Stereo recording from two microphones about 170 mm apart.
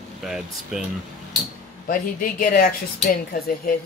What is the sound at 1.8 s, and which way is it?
Speech, 55° left (ahead or behind).